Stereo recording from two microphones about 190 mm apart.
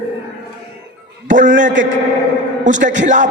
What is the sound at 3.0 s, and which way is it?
Speech, 40° right (ahead or behind).